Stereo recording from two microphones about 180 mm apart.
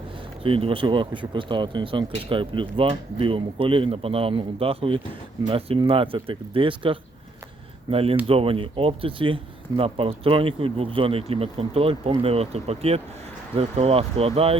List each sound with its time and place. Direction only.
0.4 s speech: 30° right (ahead or behind)